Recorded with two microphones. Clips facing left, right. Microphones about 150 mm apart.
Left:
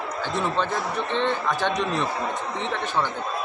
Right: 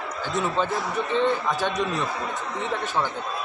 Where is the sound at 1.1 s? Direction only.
10° right (ahead or behind).